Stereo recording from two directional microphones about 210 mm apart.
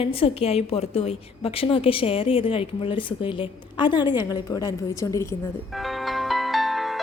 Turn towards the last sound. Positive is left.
turn(degrees=0)  # may be behind; listen again after turning